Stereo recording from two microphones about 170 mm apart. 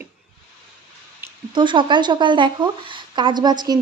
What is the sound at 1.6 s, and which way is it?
A woman's voice, 30° right (ahead or behind).